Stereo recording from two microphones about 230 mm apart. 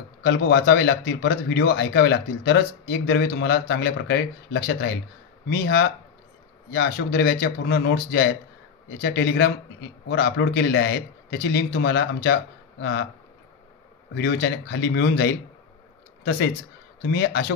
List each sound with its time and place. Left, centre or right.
0.2 s a man's voice: left
14.1 s a man's voice: left
17.0 s a man's voice: left